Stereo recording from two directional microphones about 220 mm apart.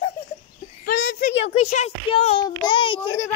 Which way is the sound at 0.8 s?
45° left (ahead or behind).